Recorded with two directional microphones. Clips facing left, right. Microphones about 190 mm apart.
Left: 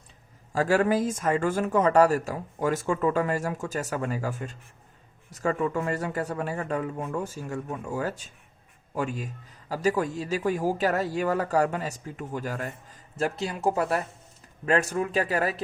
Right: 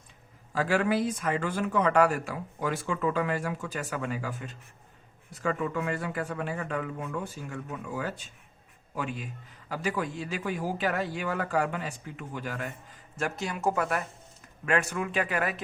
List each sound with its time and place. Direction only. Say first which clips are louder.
0.5 s a man's voice: left 3 dB; 40° left (ahead or behind)